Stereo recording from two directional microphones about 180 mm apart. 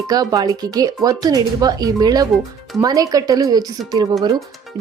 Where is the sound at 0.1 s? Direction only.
20° right (ahead or behind).